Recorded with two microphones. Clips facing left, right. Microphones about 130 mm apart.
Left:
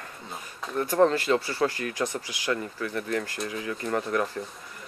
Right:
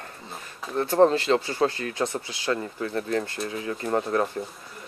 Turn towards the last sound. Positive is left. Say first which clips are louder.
# right 3 dB
turn(degrees=-30)  # may be behind; listen again after turning